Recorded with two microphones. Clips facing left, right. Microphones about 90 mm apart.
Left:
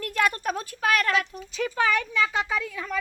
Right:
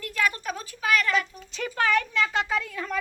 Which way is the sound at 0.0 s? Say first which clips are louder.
Left 3 dB; 50° left (ahead or behind).